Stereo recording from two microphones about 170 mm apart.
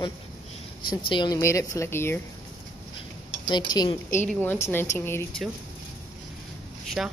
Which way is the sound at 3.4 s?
25° left (ahead or behind).